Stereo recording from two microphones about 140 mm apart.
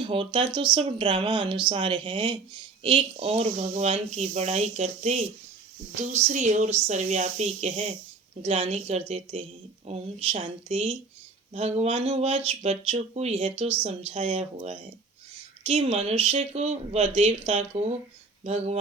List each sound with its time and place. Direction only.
0.1 s speech: 40° right (ahead or behind)